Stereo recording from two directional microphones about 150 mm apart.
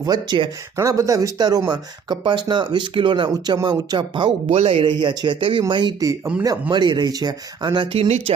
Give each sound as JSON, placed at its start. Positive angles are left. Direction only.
{"t": 0.0, "sound": "speech", "side_deg": -30}
{"t": 0.8, "sound": "speech", "side_deg": -20}